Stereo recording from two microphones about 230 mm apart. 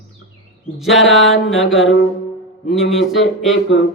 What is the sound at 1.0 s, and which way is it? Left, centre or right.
Speech, left.